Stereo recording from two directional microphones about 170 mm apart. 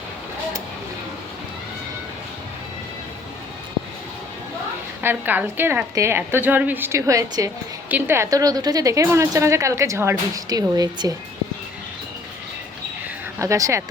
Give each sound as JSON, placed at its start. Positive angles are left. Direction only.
{"t": 5.0, "sound": "a woman's voice", "side_deg": -10}
{"t": 13.4, "sound": "speech", "side_deg": -20}